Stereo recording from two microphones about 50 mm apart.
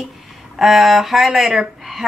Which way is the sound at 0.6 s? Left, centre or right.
Centre.